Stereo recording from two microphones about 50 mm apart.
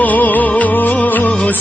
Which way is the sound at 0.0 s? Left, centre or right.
Left.